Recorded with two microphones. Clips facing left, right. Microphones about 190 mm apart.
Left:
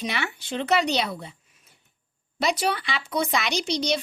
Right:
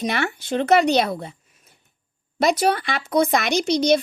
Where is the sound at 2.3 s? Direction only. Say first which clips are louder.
Right 6 dB; 45° right (ahead or behind).